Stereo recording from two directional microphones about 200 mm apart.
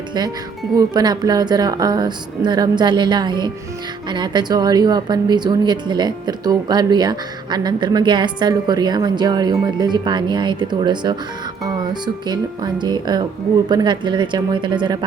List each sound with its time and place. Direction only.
0.8 s speech: 20° right (ahead or behind)